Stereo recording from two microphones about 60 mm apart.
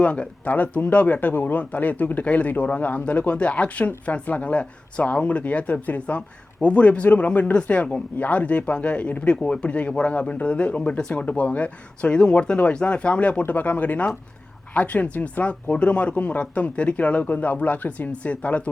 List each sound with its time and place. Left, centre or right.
0.0 s speech: left